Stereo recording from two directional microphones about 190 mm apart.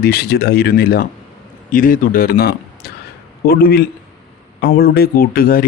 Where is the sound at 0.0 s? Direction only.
55° left (ahead or behind).